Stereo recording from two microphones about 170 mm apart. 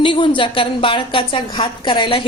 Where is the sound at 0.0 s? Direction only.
30° left (ahead or behind).